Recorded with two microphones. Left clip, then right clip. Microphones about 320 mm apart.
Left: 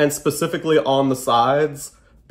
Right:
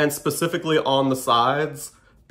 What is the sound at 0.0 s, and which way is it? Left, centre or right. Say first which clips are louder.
Speech: left 3 dB; centre.